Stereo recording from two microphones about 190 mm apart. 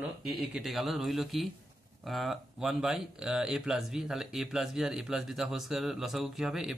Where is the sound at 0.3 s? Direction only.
Centre (ahead or behind).